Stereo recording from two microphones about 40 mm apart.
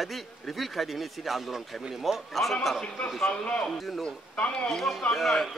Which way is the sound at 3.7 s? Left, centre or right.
Centre.